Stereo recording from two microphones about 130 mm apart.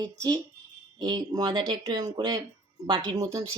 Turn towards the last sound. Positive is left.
turn(degrees=-25)  # may be behind; listen again after turning